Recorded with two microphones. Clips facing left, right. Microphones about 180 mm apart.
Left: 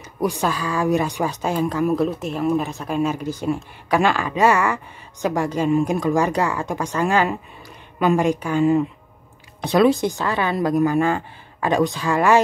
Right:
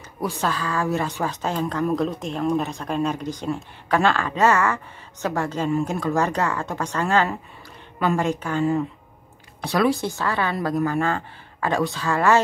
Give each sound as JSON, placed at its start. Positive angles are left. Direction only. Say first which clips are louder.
{"t": 0.2, "sound": "speech", "louder": "left 3 dB", "side_deg": 15}